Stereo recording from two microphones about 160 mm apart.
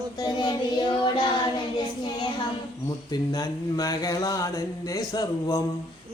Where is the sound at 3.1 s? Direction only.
25° left (ahead or behind).